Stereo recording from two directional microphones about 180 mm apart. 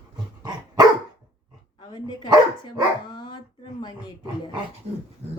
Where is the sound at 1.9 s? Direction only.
25° left (ahead or behind).